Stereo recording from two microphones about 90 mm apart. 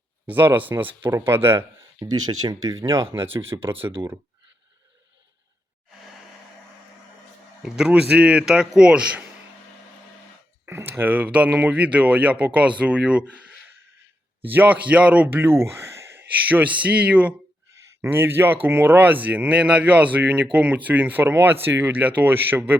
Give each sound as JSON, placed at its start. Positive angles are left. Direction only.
{"t": 0.3, "sound": "speech", "side_deg": -20}
{"t": 2.0, "sound": "speech", "side_deg": -45}
{"t": 3.1, "sound": "speech", "side_deg": -30}
{"t": 7.6, "sound": "speech", "side_deg": -10}
{"t": 10.7, "sound": "speech", "side_deg": -25}
{"t": 14.5, "sound": "speech", "side_deg": -20}
{"t": 16.7, "sound": "speech", "side_deg": -15}